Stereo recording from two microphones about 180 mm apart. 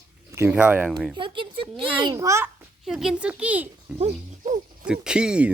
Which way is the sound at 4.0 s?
40° right (ahead or behind).